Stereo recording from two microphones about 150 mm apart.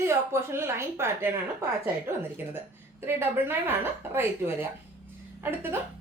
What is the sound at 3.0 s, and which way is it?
A woman's voice, 15° right (ahead or behind).